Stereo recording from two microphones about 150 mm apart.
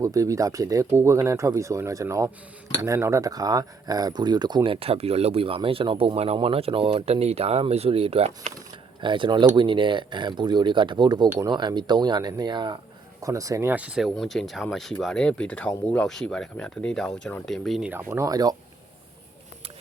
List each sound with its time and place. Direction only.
0.0 s speech: 20° right (ahead or behind); by 17.9 s centre (ahead or behind)
18.1 s speech: 20° right (ahead or behind)